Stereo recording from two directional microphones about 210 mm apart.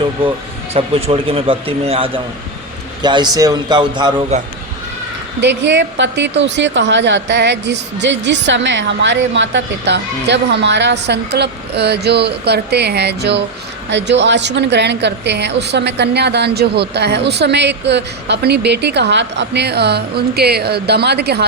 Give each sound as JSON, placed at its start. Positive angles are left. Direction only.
{"t": 0.7, "sound": "speech", "side_deg": -30}
{"t": 5.4, "sound": "a woman's voice", "side_deg": -55}